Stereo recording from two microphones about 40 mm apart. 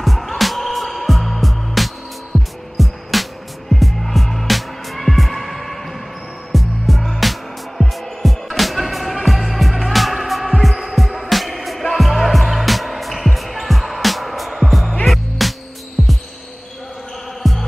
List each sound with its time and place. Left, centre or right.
0.0 s music: centre
2.3 s music: right
2.8 s music: centre
16.0 s music: centre
17.4 s heart sounds: centre